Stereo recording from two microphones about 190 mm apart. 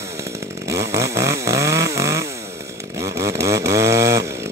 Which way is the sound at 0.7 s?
15° right (ahead or behind).